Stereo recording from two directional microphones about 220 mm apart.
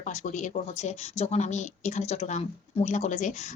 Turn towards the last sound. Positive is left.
turn(degrees=35)  # may be behind; listen again after turning